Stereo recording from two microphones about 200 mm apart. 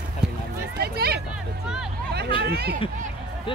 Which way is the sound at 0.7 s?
50° right (ahead or behind).